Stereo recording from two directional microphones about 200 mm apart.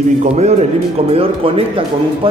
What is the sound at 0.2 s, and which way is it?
A man's voice, 35° right (ahead or behind).